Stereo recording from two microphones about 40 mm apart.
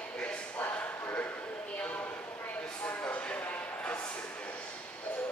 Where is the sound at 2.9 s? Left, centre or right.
Left.